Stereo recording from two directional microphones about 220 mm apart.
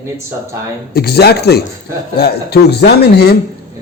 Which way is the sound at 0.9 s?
45° left (ahead or behind).